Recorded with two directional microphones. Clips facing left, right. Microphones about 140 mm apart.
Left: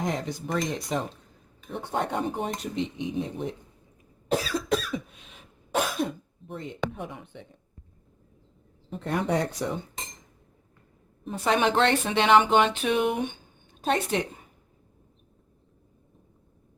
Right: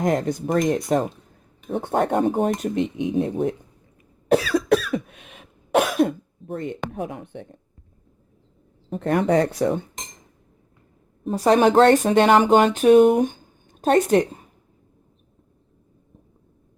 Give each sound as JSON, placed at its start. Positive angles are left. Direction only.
{"t": 0.0, "sound": "speech", "side_deg": -55}
{"t": 4.3, "sound": "cough", "side_deg": -65}
{"t": 6.5, "sound": "speech", "side_deg": -50}
{"t": 8.9, "sound": "speech", "side_deg": -60}
{"t": 11.2, "sound": "speech", "side_deg": -40}